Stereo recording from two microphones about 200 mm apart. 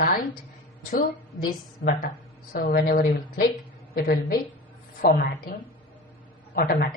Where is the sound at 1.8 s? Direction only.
60° left (ahead or behind).